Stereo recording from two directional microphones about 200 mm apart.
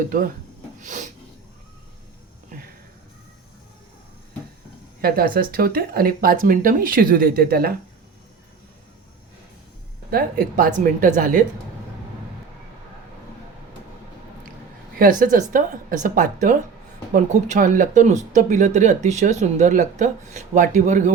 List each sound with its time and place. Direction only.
0.8 s a sound: 40° right (ahead or behind)
4.9 s speech: 45° right (ahead or behind)
10.1 s speech: 50° right (ahead or behind)
14.9 s speech: 45° right (ahead or behind)